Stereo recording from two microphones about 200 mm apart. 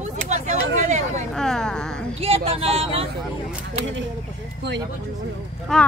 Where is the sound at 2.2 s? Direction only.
30° right (ahead or behind).